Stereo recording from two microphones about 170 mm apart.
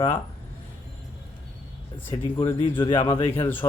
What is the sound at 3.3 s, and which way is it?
Speech, 10° left (ahead or behind).